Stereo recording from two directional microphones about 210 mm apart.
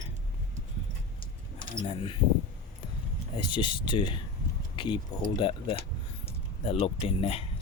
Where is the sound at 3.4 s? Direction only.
25° left (ahead or behind).